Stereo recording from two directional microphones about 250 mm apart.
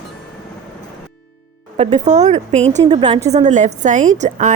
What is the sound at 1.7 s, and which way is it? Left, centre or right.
Speech, right.